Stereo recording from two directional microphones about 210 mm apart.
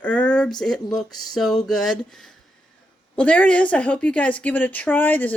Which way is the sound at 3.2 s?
5° left (ahead or behind).